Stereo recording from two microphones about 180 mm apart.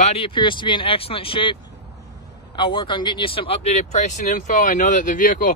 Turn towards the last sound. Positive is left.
turn(degrees=45)  # may be behind; listen again after turning